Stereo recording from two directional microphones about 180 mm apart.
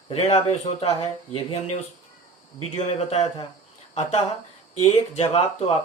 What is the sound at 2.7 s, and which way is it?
Speech, 35° left (ahead or behind).